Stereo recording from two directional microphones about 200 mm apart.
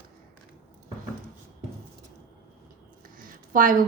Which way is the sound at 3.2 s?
45° right (ahead or behind).